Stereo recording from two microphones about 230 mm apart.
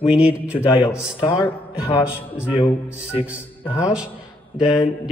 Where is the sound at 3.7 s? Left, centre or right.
Centre.